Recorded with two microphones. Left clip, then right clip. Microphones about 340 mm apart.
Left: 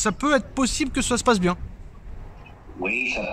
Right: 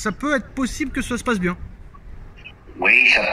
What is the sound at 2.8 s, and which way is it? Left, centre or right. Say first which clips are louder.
Speech: right 11 dB; right.